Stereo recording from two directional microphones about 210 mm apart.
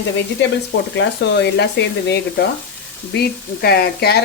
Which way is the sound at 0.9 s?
55° left (ahead or behind).